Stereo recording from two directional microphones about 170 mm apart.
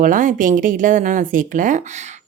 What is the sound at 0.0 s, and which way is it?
A woman's voice, 50° right (ahead or behind).